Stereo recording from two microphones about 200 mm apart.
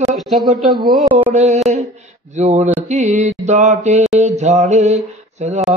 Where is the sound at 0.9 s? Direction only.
5° right (ahead or behind).